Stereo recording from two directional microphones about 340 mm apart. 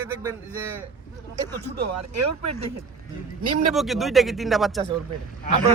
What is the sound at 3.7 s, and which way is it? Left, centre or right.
Speech, centre.